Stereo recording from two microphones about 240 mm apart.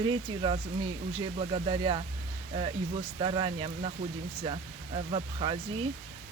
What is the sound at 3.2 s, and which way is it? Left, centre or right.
Speech, right.